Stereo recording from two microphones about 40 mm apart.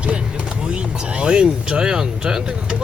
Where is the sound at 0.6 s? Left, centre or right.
Right.